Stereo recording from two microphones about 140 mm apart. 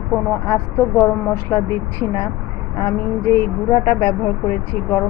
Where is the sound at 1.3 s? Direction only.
20° left (ahead or behind).